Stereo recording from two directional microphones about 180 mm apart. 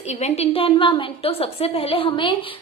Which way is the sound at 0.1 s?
35° left (ahead or behind).